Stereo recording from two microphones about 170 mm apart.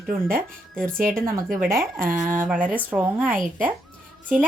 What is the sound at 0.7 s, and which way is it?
Speech, 5° left (ahead or behind).